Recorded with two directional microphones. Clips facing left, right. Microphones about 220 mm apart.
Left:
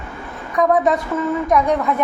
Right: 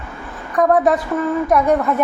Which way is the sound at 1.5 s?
5° right (ahead or behind).